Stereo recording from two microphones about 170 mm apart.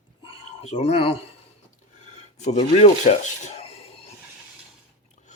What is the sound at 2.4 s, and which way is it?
Speech, 40° left (ahead or behind).